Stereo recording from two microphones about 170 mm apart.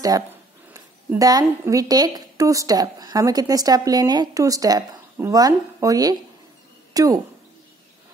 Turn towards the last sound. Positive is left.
turn(degrees=-20)  # may be behind; listen again after turning